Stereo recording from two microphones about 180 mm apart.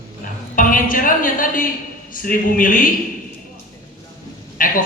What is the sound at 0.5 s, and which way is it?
A man's voice, 50° left (ahead or behind).